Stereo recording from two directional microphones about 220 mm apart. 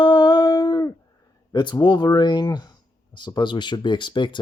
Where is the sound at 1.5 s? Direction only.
20° left (ahead or behind).